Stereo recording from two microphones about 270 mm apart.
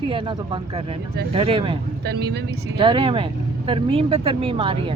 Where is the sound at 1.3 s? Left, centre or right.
Centre.